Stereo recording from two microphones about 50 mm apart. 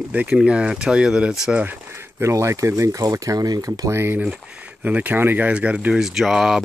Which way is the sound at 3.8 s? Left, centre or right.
Right.